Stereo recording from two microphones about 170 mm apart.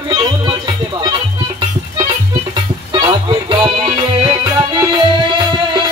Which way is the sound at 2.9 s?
30° right (ahead or behind).